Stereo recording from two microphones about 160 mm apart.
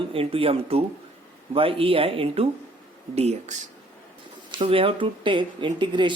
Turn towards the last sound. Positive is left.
turn(degrees=-30)  # may be behind; listen again after turning